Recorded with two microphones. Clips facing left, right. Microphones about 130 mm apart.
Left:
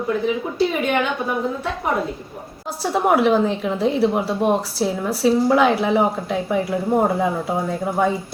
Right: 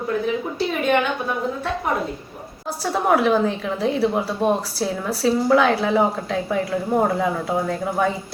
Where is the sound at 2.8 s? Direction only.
20° left (ahead or behind).